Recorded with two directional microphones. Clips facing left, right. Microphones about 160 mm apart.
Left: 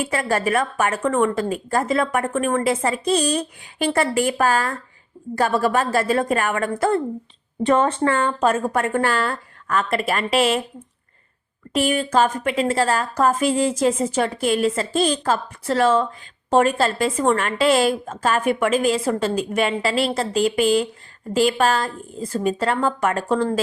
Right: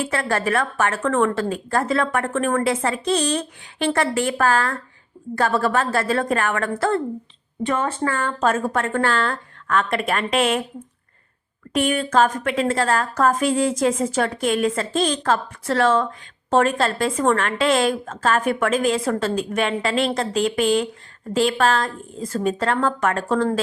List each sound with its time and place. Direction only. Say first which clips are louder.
0.0 s a woman's voice: left 1 dB; 10° left (ahead or behind)
7.6 s speech: left 5 dB; 35° left (ahead or behind)
8.4 s a woman's voice: left 1 dB; 10° left (ahead or behind)
11.7 s a woman's voice: even; 5° left (ahead or behind)